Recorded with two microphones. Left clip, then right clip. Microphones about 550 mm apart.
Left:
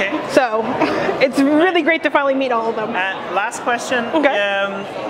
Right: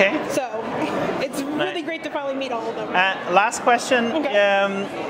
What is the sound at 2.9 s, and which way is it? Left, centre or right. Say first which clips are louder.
Speech: right 2 dB; right.